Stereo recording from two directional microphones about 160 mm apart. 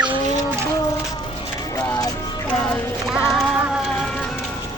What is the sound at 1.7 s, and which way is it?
Music, 20° left (ahead or behind).